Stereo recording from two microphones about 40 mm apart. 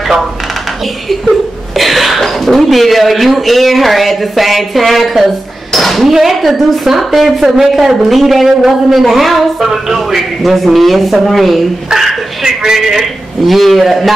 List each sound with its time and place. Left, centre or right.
1.8 s a woman's voice: centre
11.9 s speech: centre
13.5 s a woman's voice: centre